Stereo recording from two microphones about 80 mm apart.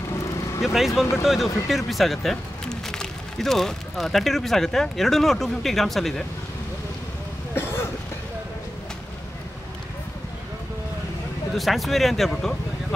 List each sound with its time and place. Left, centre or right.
0.6 s speech: centre
7.5 s cough: left
11.5 s speech: centre